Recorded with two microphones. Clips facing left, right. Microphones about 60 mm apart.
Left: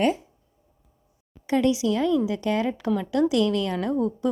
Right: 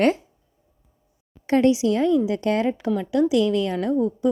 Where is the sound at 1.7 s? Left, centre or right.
Right.